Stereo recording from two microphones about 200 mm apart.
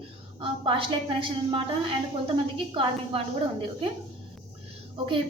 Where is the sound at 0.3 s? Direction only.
25° right (ahead or behind).